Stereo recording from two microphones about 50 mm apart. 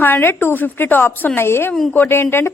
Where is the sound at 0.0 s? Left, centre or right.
Left.